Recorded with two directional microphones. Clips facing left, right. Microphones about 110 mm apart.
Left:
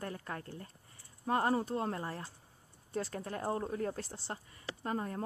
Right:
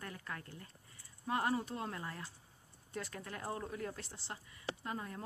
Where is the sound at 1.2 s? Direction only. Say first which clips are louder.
Left 4 dB; 35° left (ahead or behind).